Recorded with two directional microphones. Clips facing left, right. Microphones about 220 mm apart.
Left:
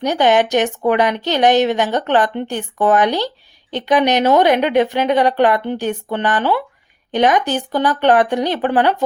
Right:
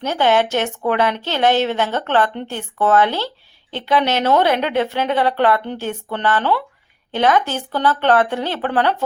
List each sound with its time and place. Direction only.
0.0 s a woman's voice: 15° left (ahead or behind)